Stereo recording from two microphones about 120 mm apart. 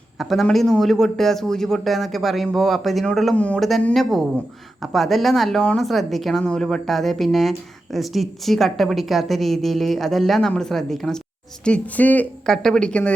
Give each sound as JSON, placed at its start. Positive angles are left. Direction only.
{"t": 0.2, "sound": "a woman's voice", "side_deg": 0}